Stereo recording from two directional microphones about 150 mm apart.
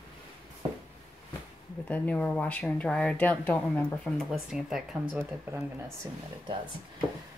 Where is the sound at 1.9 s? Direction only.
10° left (ahead or behind).